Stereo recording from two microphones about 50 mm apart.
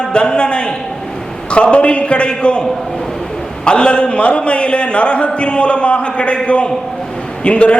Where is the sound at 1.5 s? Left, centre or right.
Left.